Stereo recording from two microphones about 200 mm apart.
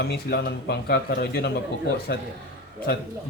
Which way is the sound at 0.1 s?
50° left (ahead or behind).